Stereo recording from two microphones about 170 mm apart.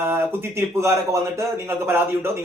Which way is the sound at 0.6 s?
15° right (ahead or behind).